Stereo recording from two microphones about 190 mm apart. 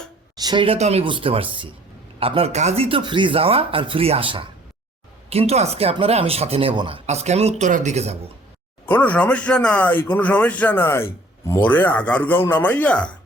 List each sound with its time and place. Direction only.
0.3 s speech: 25° right (ahead or behind)
8.9 s a man's voice: 10° left (ahead or behind)